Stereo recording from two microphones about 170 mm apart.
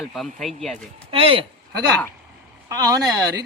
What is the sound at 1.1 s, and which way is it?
Speech, 30° right (ahead or behind).